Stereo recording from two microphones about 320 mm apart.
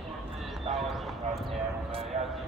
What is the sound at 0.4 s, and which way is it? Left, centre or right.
Horse, centre.